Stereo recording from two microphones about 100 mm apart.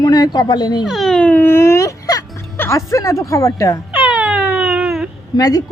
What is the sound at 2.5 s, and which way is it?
Music, 20° left (ahead or behind).